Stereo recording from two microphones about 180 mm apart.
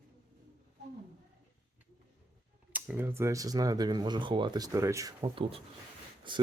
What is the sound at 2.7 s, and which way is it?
Speech, 10° right (ahead or behind).